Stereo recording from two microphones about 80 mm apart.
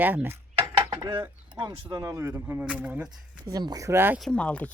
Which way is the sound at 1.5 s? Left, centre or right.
Right.